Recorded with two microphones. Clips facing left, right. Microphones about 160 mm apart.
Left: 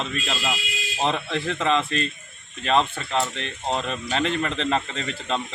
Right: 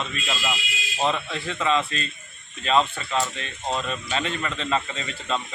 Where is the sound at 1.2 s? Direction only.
55° left (ahead or behind).